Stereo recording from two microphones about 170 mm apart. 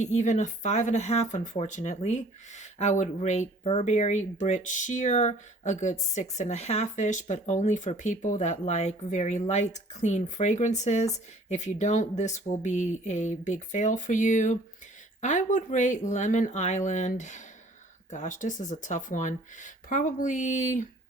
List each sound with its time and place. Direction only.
0.0 s speech: 45° left (ahead or behind)